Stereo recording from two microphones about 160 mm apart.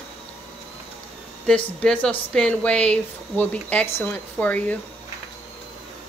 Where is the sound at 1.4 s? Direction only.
5° left (ahead or behind).